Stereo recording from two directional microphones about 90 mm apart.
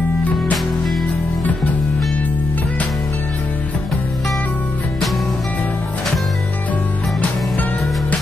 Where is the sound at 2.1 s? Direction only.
15° left (ahead or behind).